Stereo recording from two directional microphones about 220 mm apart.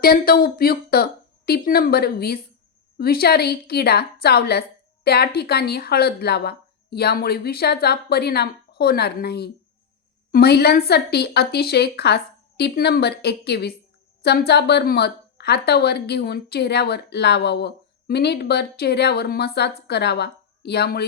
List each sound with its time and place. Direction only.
0.0 s speech: 40° left (ahead or behind)